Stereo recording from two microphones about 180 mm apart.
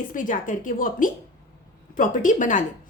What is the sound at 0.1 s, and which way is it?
A woman's voice, 45° left (ahead or behind).